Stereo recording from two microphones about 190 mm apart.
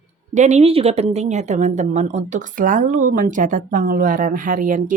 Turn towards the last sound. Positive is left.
turn(degrees=-45)  # may be behind; listen again after turning